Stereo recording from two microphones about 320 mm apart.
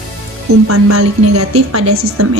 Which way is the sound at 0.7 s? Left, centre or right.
Right.